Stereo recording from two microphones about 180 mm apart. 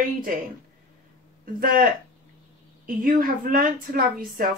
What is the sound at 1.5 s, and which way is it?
Speech, 55° right (ahead or behind).